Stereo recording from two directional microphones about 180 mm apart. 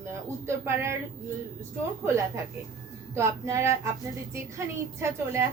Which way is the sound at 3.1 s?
15° right (ahead or behind).